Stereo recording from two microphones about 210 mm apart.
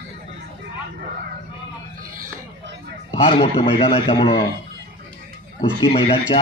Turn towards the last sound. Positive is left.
turn(degrees=25)  # may be behind; listen again after turning